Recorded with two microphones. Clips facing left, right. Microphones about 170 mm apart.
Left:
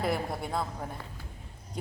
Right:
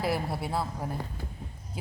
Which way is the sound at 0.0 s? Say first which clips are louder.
Right 1 dB; 5° right (ahead or behind).